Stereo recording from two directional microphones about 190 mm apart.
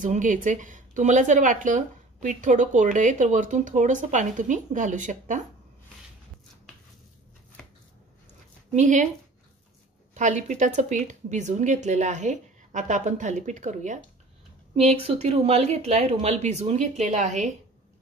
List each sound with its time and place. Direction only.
0.0 s speech: 40° right (ahead or behind)
8.7 s speech: 40° right (ahead or behind)
10.1 s a woman's voice: 40° right (ahead or behind)